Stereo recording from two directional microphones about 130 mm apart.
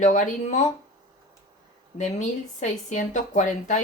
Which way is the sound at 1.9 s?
70° left (ahead or behind).